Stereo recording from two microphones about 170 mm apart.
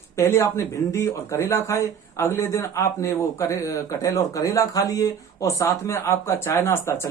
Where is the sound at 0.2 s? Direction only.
15° left (ahead or behind).